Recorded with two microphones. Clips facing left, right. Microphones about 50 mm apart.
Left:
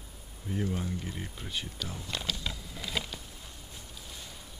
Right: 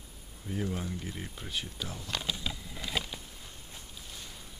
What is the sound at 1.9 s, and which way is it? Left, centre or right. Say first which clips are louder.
Speech: left 1 dB; centre.